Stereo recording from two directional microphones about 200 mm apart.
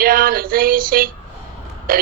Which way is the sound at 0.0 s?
45° right (ahead or behind).